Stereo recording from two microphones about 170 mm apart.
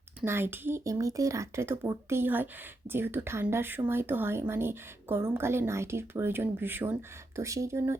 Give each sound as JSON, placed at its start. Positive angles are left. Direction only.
{"t": 0.3, "sound": "speech", "side_deg": -15}